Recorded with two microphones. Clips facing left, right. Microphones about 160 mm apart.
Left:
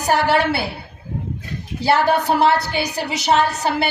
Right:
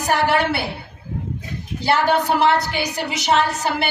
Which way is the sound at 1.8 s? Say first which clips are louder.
Left 1 dB; 35° left (ahead or behind).